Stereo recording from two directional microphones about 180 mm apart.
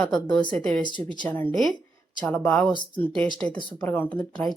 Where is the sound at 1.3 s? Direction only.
10° left (ahead or behind).